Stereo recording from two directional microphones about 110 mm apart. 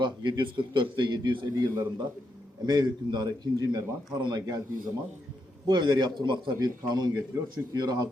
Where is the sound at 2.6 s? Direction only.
40° right (ahead or behind).